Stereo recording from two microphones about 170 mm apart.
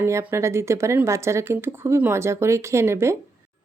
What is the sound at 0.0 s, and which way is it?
A woman's voice, 15° right (ahead or behind).